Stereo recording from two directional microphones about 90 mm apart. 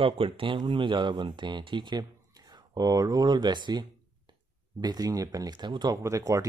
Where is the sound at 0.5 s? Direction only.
60° right (ahead or behind).